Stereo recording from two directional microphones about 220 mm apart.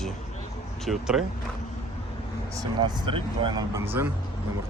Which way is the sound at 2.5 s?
20° right (ahead or behind).